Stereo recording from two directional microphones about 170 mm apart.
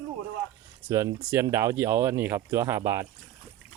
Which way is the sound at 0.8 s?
15° right (ahead or behind).